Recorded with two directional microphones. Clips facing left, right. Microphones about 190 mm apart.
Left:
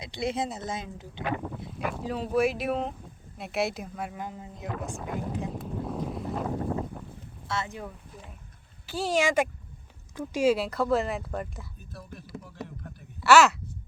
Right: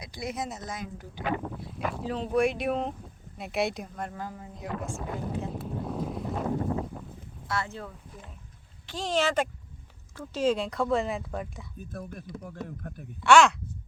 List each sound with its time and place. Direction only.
0.0 s speech: 25° left (ahead or behind)
1.4 s speech: centre (ahead or behind)
4.2 s speech: 20° left (ahead or behind)
4.5 s speech: centre (ahead or behind)
5.5 s boat: centre (ahead or behind)
7.5 s speech: 20° left (ahead or behind); by 11.6 s centre (ahead or behind)
11.9 s a man's voice: 50° right (ahead or behind)
13.2 s speech: 5° left (ahead or behind)